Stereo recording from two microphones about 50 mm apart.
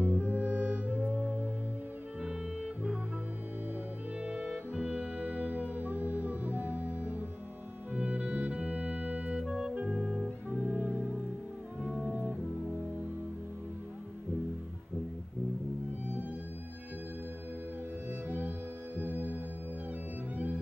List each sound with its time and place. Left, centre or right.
0.0 s music: right; by 3.0 s centre
4.2 s music: right
4.9 s music: right
7.9 s organ: right
9.4 s music: centre
10.5 s music: right
18.9 s music: right